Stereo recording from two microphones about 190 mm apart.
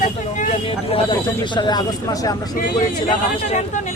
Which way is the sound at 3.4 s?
35° left (ahead or behind).